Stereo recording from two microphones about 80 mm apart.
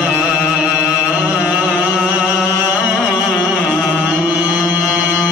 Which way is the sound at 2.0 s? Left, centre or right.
Centre.